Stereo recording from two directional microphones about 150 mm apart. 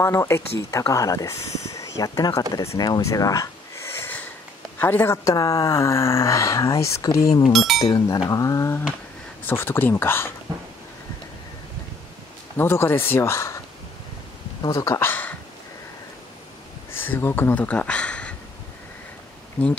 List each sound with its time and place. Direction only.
0.0 s speech: 15° left (ahead or behind)
2.5 s snort: 20° left (ahead or behind)
4.7 s speech: 15° left (ahead or behind)
7.5 s speech: centre (ahead or behind)
7.8 s speech: 25° left (ahead or behind)
12.5 s speech: 15° left (ahead or behind)
14.6 s speech: 20° left (ahead or behind)
16.9 s speech: 15° left (ahead or behind)
19.6 s speech: 10° left (ahead or behind)